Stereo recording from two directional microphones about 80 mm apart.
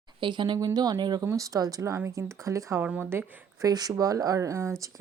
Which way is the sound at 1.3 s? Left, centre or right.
Right.